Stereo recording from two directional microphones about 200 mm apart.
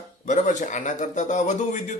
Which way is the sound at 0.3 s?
40° left (ahead or behind).